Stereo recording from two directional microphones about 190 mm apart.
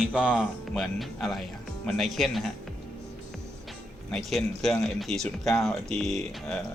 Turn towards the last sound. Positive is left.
turn(degrees=0)  # may be behind; listen again after turning